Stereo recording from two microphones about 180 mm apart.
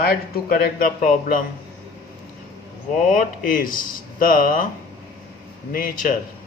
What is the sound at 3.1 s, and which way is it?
Speech, 50° left (ahead or behind).